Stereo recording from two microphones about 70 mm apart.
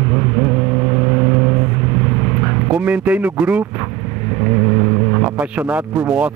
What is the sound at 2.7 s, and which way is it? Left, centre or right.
Speech, centre.